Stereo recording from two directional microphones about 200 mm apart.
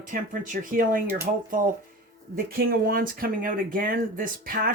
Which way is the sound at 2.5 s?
45° right (ahead or behind).